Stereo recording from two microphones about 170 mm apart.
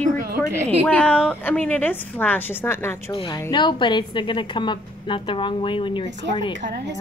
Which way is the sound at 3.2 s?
25° left (ahead or behind).